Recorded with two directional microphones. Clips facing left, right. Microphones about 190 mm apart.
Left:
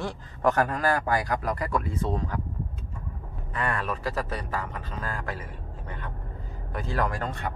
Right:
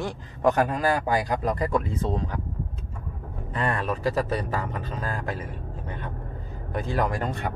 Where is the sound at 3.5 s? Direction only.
25° right (ahead or behind).